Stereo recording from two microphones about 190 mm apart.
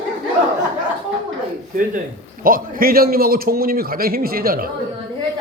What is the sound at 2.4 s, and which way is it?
A man's voice, 50° right (ahead or behind).